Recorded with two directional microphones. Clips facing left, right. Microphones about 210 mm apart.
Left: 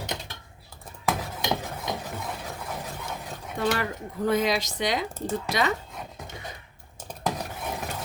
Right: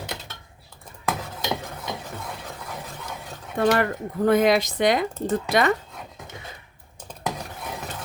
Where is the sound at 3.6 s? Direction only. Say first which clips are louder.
Right 6 dB; 55° right (ahead or behind).